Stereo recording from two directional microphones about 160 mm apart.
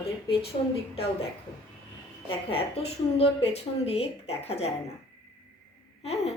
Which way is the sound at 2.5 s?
35° left (ahead or behind).